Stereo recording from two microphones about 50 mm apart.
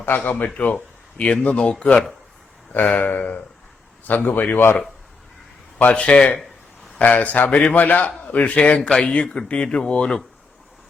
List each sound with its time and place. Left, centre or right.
0.3 s a man's voice: left
2.7 s a man's voice: left
4.5 s speech: left
5.9 s speech: left
7.0 s a man's voice: left
8.9 s speech: centre